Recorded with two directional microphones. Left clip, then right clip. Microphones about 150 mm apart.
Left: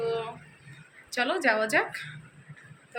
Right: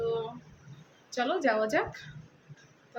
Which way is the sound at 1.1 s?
5° right (ahead or behind).